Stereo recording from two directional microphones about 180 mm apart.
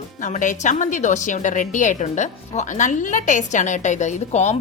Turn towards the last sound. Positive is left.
turn(degrees=40)  # may be behind; listen again after turning